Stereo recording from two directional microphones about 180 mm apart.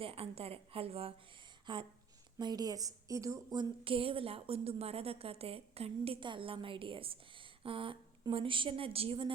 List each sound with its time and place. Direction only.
0.0 s a woman's voice: 30° right (ahead or behind)